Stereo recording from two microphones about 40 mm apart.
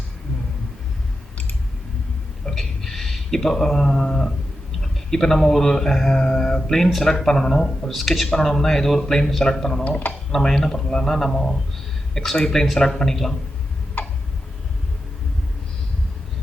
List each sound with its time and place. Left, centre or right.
2.5 s speech: centre
14.0 s tick-tock: left